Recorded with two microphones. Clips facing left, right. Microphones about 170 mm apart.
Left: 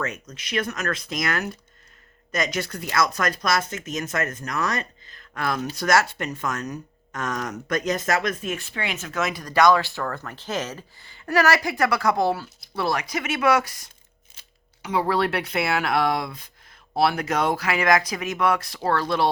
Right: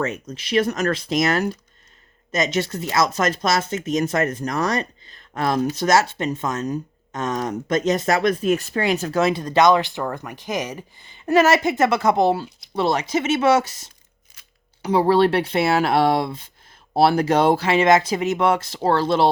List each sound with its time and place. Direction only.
0.0 s speech: 30° right (ahead or behind)
14.4 s a sound: 30° left (ahead or behind)
14.8 s speech: 35° right (ahead or behind)